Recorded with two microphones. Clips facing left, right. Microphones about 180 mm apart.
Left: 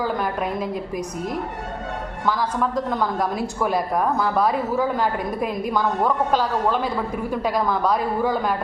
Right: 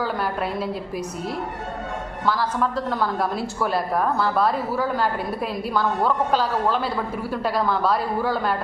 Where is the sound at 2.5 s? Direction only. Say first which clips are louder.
Left 1 dB; 10° left (ahead or behind).